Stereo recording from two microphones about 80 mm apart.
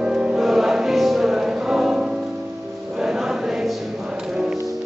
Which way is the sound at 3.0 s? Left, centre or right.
Centre.